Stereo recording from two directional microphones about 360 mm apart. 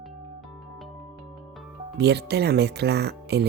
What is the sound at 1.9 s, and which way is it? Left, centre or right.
Speech, right.